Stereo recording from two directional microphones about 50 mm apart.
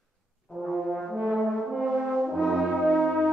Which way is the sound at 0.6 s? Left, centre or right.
Centre.